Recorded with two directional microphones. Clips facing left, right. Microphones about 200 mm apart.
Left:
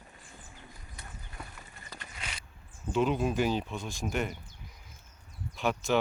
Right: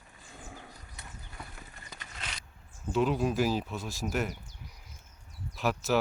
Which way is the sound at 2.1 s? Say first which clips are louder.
Right 1 dB; 10° left (ahead or behind).